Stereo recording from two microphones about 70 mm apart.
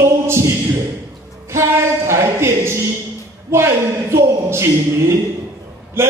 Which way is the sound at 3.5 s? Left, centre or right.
Right.